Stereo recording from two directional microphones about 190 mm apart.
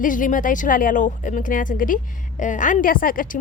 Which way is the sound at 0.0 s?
45° left (ahead or behind).